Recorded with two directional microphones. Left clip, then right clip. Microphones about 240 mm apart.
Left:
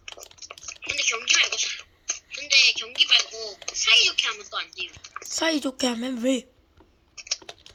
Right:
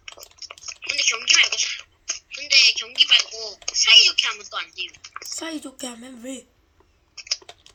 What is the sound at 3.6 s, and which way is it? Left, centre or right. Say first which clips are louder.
A woman's voice: right 5 dB; centre.